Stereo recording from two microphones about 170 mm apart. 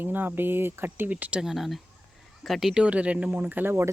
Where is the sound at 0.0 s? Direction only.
10° right (ahead or behind).